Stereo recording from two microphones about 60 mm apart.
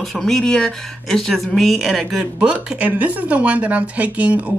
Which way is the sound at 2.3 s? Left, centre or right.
Centre.